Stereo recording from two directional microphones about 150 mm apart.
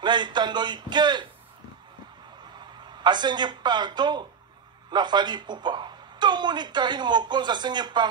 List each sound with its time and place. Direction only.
0.0 s speech: 30° right (ahead or behind)
2.6 s speech: 30° right (ahead or behind)